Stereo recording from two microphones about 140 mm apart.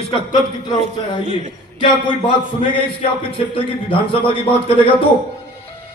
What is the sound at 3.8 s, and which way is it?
Speech, 40° left (ahead or behind).